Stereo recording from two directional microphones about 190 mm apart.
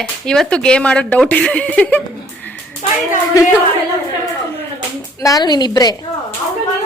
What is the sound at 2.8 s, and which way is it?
Speech, 40° left (ahead or behind).